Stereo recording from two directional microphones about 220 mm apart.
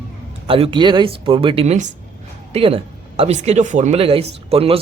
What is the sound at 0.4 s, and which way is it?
Speech, 25° right (ahead or behind).